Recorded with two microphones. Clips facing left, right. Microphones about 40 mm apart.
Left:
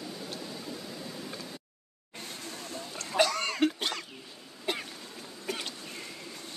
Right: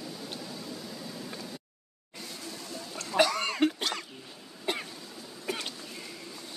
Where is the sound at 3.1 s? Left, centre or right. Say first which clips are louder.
Right 1 dB; centre.